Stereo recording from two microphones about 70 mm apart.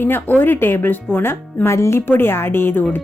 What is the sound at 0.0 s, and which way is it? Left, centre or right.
Speech, left.